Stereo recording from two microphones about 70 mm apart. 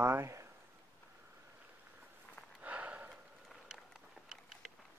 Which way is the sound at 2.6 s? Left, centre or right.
Right.